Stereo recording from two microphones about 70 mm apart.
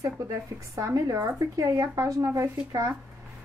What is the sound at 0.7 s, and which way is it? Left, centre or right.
A woman's voice, right.